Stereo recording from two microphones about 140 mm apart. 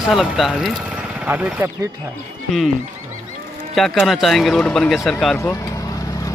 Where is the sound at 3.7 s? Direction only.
Centre (ahead or behind).